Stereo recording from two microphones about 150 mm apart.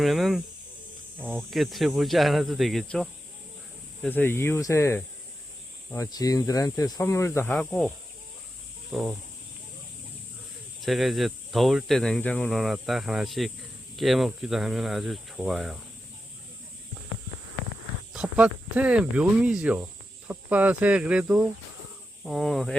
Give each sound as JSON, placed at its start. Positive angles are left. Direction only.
{"t": 0.0, "sound": "speech", "side_deg": 0}
{"t": 4.1, "sound": "speech", "side_deg": 15}
{"t": 7.5, "sound": "speech", "side_deg": 5}
{"t": 8.9, "sound": "speech", "side_deg": -10}
{"t": 10.8, "sound": "speech", "side_deg": 0}
{"t": 18.1, "sound": "speech", "side_deg": -5}